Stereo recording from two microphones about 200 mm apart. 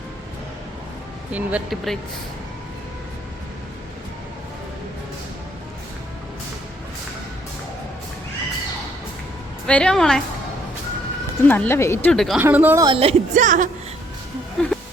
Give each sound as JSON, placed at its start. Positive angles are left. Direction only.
{"t": 1.3, "sound": "speech", "side_deg": -5}
{"t": 9.6, "sound": "a woman's voice", "side_deg": 5}
{"t": 11.4, "sound": "speech", "side_deg": 10}
{"t": 12.1, "sound": "a woman's voice", "side_deg": 0}
{"t": 12.4, "sound": "a woman's voice", "side_deg": -10}
{"t": 14.6, "sound": "a woman's voice", "side_deg": 5}